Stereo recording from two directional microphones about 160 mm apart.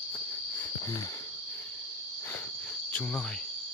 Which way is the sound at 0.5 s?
15° left (ahead or behind).